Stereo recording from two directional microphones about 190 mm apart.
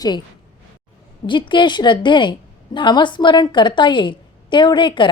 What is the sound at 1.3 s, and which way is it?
A woman's voice, 25° left (ahead or behind).